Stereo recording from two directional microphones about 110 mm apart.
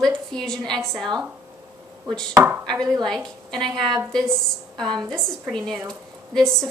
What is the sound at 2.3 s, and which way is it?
Chopping, 15° right (ahead or behind).